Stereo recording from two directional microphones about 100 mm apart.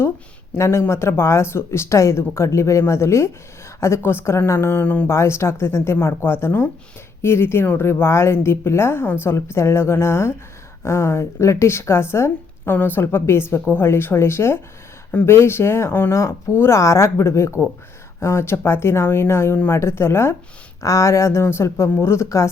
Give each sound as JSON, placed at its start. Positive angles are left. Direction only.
{"t": 0.5, "sound": "a woman's voice", "side_deg": 25}
{"t": 5.1, "sound": "a woman's voice", "side_deg": 30}